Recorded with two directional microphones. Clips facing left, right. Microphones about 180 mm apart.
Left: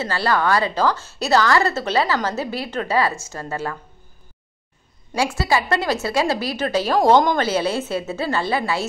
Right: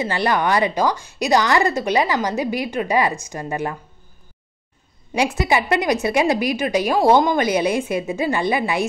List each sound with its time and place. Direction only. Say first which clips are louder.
0.0 s a woman's voice: right 1 dB; 20° right (ahead or behind)
5.1 s a woman's voice: right 1 dB; 20° right (ahead or behind)